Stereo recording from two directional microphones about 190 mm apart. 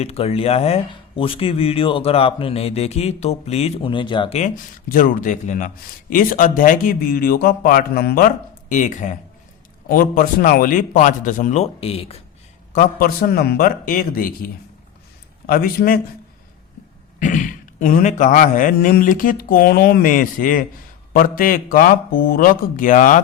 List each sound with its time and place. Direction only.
0.0 s speech: 30° left (ahead or behind)
4.4 s speech: 40° left (ahead or behind)
8.7 s speech: 40° left (ahead or behind)
12.7 s speech: 50° left (ahead or behind)
17.2 s speech: 40° left (ahead or behind)